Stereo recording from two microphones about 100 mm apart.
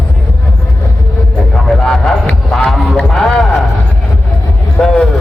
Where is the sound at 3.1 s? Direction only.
5° left (ahead or behind).